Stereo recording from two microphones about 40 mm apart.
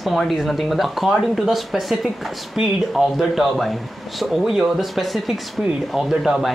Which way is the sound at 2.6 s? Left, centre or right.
Centre.